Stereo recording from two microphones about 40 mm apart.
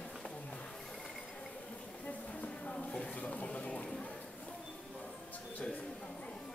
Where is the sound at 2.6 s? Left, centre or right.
Left.